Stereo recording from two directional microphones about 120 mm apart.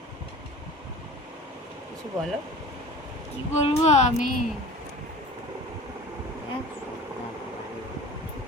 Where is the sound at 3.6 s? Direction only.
65° left (ahead or behind).